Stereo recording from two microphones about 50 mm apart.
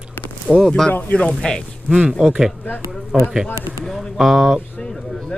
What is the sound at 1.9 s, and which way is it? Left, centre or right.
Speech, centre.